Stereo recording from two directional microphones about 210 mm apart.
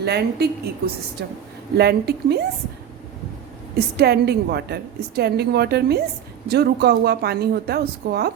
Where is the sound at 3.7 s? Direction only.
50° right (ahead or behind).